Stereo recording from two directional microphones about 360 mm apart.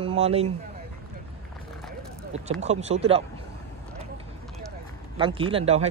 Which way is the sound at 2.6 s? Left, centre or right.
Centre.